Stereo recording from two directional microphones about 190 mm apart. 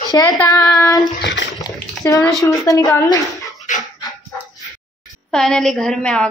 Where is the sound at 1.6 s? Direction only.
20° left (ahead or behind).